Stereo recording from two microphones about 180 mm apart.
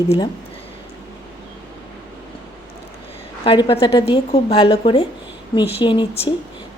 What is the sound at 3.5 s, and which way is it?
A woman's voice, 30° left (ahead or behind).